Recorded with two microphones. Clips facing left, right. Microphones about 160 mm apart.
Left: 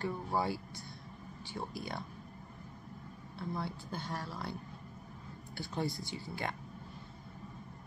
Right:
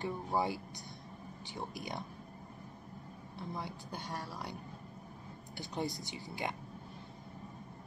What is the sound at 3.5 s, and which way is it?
Speech, 15° right (ahead or behind).